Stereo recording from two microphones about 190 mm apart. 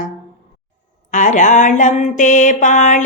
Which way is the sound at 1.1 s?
40° left (ahead or behind).